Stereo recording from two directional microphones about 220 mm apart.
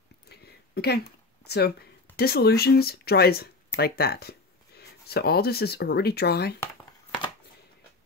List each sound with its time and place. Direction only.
0.3 s speech: 45° left (ahead or behind)